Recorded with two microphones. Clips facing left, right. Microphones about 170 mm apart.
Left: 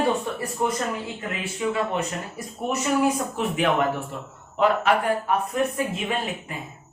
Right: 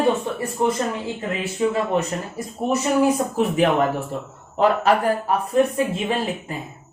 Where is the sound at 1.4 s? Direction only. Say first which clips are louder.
Right 3 dB; 40° right (ahead or behind).